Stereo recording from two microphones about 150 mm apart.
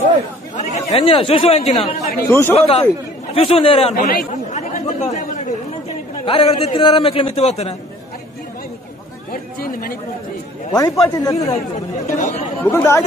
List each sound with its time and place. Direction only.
0.6 s speech: 40° left (ahead or behind)
2.2 s speech: 15° left (ahead or behind)
2.5 s a man's voice: 45° left (ahead or behind)
3.9 s speech: 80° left
4.5 s chatter: 50° left (ahead or behind)
6.2 s a man's voice: 40° left (ahead or behind)
9.3 s speech: 75° left (ahead or behind)
10.7 s speech: 20° left (ahead or behind)
12.2 s speech: 55° left (ahead or behind)
12.7 s speech: 20° left (ahead or behind)